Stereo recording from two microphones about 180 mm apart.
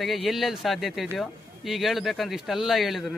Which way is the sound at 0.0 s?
Centre (ahead or behind).